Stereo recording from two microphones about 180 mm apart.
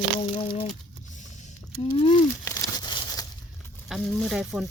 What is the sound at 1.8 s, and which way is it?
Speech, 30° left (ahead or behind).